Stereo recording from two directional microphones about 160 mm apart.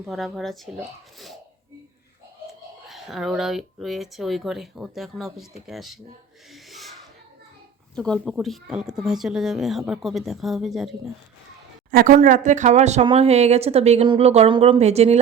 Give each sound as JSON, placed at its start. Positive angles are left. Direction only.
{"t": 0.0, "sound": "speech", "side_deg": 0}
{"t": 2.9, "sound": "speech", "side_deg": 0}
{"t": 6.5, "sound": "a sound", "side_deg": 0}
{"t": 7.9, "sound": "speech", "side_deg": 5}
{"t": 11.9, "sound": "speech", "side_deg": -60}